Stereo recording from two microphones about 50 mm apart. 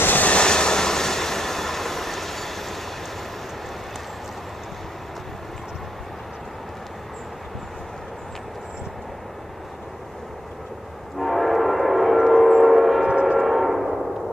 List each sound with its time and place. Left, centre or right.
0.0 s train: left
0.3 s train: centre
11.1 s train: centre
13.0 s train: centre
13.4 s train: centre